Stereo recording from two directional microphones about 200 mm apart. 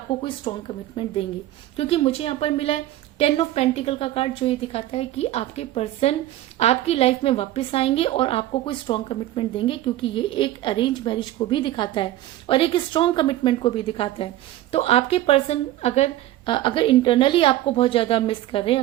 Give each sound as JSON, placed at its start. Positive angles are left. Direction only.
{"t": 0.2, "sound": "a woman's voice", "side_deg": 25}